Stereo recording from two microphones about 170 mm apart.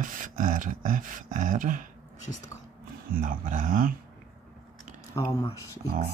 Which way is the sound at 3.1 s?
55° right (ahead or behind).